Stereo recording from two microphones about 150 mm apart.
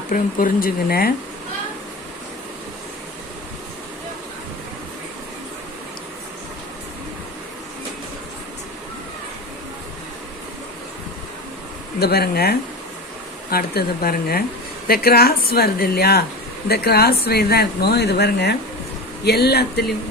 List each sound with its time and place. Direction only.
0.1 s speech: 70° left (ahead or behind)
11.9 s speech: 90° left